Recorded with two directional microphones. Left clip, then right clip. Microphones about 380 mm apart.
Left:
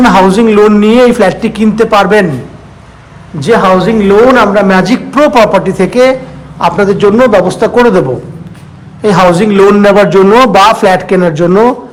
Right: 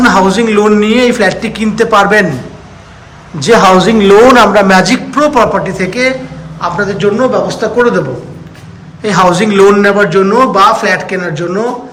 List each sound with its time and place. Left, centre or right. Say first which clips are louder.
0.0 s a man's voice: left 3 dB; centre
3.4 s a man's voice: right 1 dB; centre